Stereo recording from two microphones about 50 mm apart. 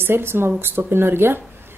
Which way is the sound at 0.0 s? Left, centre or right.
Right.